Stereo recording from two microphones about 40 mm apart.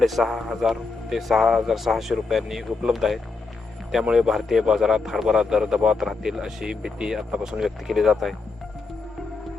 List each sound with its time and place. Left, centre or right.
0.0 s speech: centre
7.9 s speech: centre